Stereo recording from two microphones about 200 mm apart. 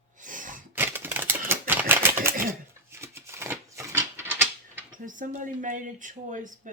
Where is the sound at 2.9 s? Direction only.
15° right (ahead or behind).